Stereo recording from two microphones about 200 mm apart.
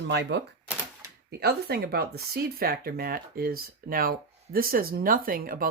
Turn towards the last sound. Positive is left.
turn(degrees=-45)  # may be behind; listen again after turning